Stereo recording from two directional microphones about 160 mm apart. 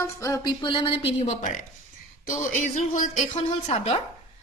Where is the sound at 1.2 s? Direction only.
50° left (ahead or behind).